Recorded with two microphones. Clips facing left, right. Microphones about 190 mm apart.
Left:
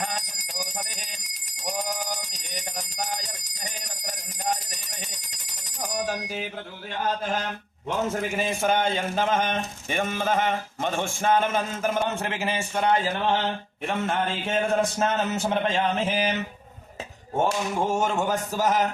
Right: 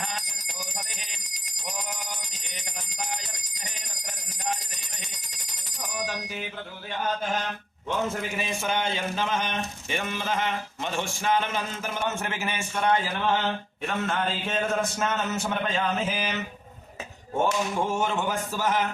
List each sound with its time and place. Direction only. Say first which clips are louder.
0.0 s bell: left 4 dB; 45° left (ahead or behind)
2.4 s bell: left 6 dB; 45° left (ahead or behind)
3.6 s alarm clock: left 6 dB; 40° left (ahead or behind)
5.8 s bicycle bell: left 4 dB; 45° left (ahead or behind)
8.1 s speech: left 4 dB; 45° left (ahead or behind)
12.0 s a man's voice: left 2 dB; 30° left (ahead or behind)
17.8 s speech: left 2 dB; 45° left (ahead or behind)